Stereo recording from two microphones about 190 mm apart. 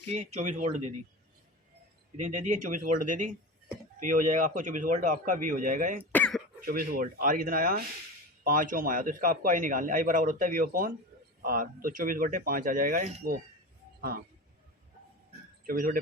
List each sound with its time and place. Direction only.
0.1 s speech: 35° right (ahead or behind)
2.1 s a man's voice: 40° right (ahead or behind)
6.1 s cough: 5° left (ahead or behind)
6.6 s a man's voice: 50° right (ahead or behind)
15.6 s a man's voice: 50° right (ahead or behind)